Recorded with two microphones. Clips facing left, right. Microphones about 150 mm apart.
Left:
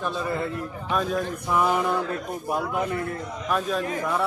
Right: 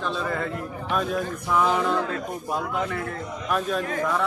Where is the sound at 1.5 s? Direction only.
10° left (ahead or behind).